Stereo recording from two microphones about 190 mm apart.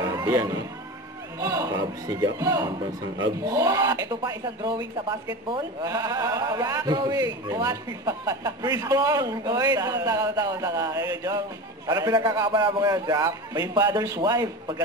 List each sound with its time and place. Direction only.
0.1 s speech: 20° right (ahead or behind)